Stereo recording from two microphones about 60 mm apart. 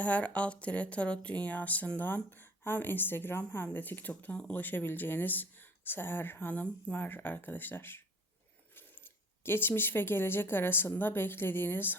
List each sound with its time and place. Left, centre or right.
0.0 s speech: left
9.4 s speech: left